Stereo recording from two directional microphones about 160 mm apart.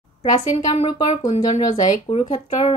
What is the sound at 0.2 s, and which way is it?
Speech, 45° left (ahead or behind).